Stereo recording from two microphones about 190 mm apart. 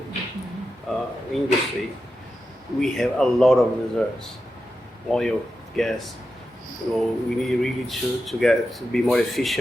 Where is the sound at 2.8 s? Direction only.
Centre (ahead or behind).